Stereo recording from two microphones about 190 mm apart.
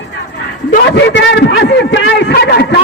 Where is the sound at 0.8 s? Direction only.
70° left (ahead or behind).